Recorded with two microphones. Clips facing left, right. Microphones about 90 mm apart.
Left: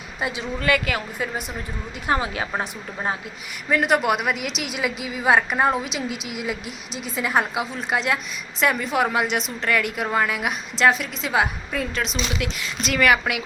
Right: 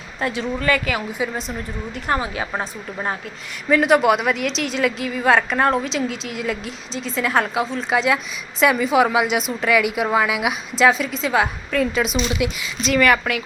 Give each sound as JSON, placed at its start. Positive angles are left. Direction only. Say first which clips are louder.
{"t": 0.2, "sound": "speech", "louder": "right 4 dB", "side_deg": 15}
{"t": 2.2, "sound": "a woman's voice", "louder": "right 1 dB", "side_deg": -30}
{"t": 3.7, "sound": "a woman's voice", "louder": "right 5 dB", "side_deg": 0}